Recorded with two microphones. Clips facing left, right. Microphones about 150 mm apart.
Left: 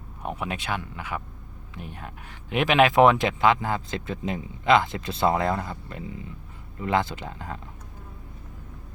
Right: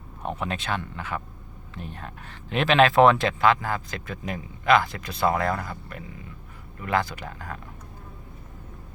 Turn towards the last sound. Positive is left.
turn(degrees=20)  # may be behind; listen again after turning